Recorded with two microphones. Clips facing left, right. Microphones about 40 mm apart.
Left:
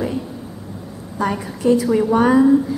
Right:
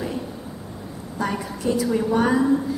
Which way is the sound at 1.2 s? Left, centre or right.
Centre.